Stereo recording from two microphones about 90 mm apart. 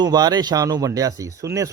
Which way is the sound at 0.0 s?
45° right (ahead or behind).